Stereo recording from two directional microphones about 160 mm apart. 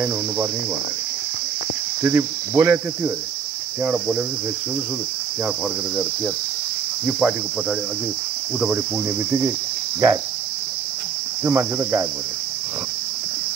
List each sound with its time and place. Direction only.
2.0 s cricket: 15° right (ahead or behind)
7.1 s cricket: 5° right (ahead or behind)
10.0 s cricket: 15° right (ahead or behind)
11.4 s cricket: 20° right (ahead or behind)